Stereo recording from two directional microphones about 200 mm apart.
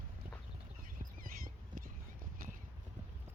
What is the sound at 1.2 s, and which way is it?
Horse, 45° right (ahead or behind).